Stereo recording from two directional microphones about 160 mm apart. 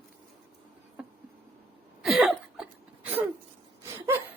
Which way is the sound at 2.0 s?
Centre (ahead or behind).